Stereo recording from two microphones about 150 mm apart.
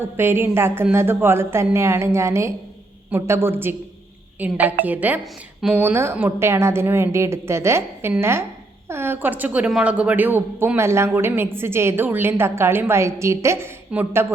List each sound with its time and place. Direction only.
0.0 s speech: 15° right (ahead or behind)